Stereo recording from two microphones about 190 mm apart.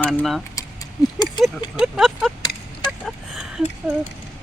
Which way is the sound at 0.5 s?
20° left (ahead or behind).